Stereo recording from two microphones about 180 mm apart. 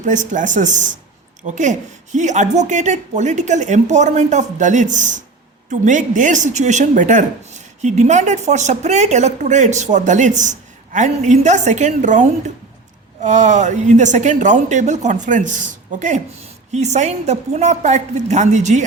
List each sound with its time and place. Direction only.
0.0 s speech: 45° right (ahead or behind)